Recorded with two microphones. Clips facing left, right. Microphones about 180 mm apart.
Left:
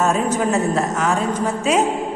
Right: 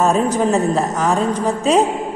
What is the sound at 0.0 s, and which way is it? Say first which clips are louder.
A man's voice: right 3 dB; 35° right (ahead or behind).